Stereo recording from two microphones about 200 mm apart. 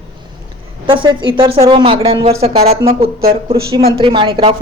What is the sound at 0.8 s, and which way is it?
A woman's voice, 25° right (ahead or behind).